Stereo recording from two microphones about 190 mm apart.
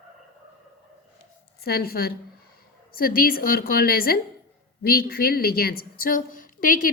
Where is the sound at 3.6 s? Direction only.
50° left (ahead or behind).